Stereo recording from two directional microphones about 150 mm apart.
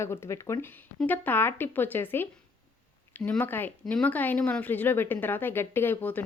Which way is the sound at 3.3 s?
10° left (ahead or behind).